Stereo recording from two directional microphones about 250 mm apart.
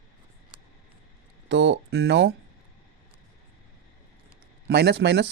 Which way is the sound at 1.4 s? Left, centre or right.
Right.